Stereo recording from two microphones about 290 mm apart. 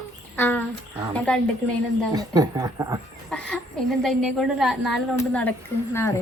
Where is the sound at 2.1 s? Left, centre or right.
Centre.